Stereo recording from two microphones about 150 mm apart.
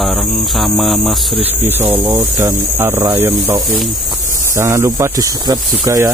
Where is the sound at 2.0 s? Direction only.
20° right (ahead or behind).